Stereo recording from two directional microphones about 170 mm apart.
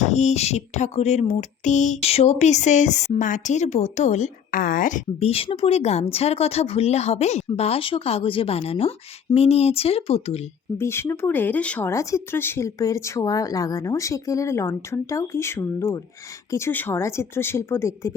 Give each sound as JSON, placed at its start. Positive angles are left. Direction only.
{"t": 0.0, "sound": "speech", "side_deg": 40}
{"t": 5.3, "sound": "speech", "side_deg": 35}
{"t": 10.8, "sound": "speech", "side_deg": 15}